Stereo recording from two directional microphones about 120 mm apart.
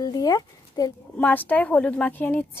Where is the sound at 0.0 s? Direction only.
30° left (ahead or behind).